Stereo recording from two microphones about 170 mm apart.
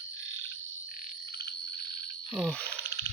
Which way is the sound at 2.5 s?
5° left (ahead or behind).